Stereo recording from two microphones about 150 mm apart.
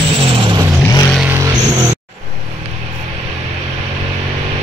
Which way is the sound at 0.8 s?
20° left (ahead or behind).